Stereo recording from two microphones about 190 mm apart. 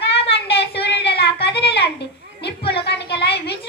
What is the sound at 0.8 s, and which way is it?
A child's voice, 65° left (ahead or behind).